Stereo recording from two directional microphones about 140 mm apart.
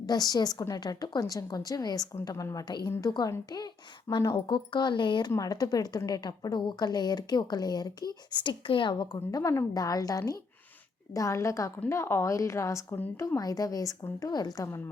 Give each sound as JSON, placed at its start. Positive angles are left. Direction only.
{"t": 0.0, "sound": "a woman's voice", "side_deg": 30}